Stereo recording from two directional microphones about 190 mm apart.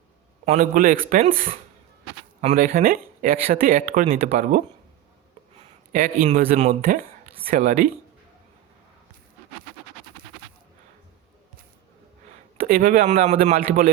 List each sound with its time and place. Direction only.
0.4 s speech: 40° right (ahead or behind)
5.9 s speech: 45° right (ahead or behind)
12.6 s speech: 50° right (ahead or behind)